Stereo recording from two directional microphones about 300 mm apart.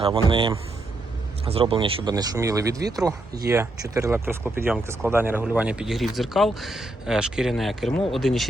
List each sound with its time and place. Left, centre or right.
0.0 s speech: centre